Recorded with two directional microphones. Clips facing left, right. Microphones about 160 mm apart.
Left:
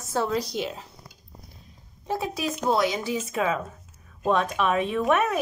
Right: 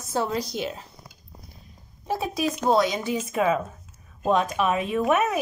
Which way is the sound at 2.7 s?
20° right (ahead or behind).